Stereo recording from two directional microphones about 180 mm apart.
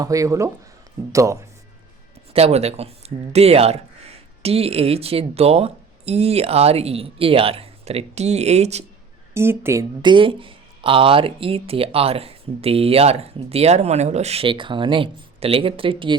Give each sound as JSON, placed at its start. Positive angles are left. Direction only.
{"t": 0.0, "sound": "speech", "side_deg": -20}
{"t": 2.3, "sound": "speech", "side_deg": -35}
{"t": 9.3, "sound": "speech", "side_deg": -15}
{"t": 10.0, "sound": "speech", "side_deg": -25}